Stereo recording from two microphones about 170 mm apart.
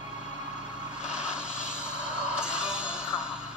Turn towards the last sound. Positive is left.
turn(degrees=-5)  # may be behind; listen again after turning